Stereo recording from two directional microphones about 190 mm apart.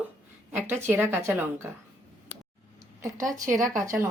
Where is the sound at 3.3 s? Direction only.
45° right (ahead or behind).